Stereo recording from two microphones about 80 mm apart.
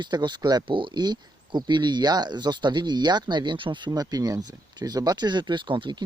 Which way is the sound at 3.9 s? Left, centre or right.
Right.